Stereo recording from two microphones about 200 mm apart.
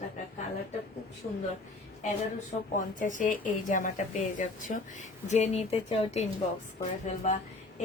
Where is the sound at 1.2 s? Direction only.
35° left (ahead or behind).